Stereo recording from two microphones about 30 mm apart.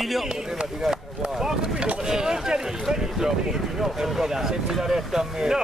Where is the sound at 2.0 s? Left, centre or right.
Right.